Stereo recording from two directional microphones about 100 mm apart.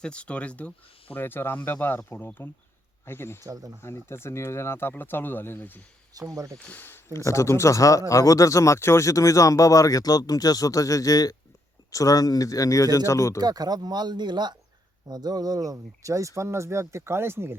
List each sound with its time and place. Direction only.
0.0 s speech: 10° left (ahead or behind)
3.4 s speech: 35° right (ahead or behind)
3.8 s speech: 25° left (ahead or behind)
6.1 s speech: 35° right (ahead or behind)
6.7 s speech: 20° left (ahead or behind)
13.4 s speech: 40° right (ahead or behind); by 17.6 s 25° right (ahead or behind)